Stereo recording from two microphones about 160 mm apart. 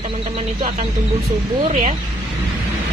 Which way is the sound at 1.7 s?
45° right (ahead or behind).